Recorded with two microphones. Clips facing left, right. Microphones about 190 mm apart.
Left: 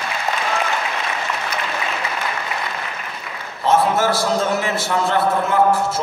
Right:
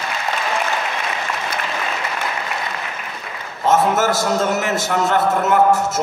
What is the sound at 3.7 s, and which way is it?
A man's voice, 45° right (ahead or behind).